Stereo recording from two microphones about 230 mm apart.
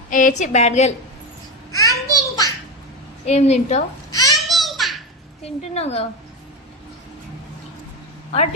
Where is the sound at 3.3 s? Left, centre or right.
Left.